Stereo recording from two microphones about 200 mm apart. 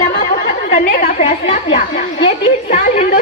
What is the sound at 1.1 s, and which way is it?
Speech, 30° left (ahead or behind).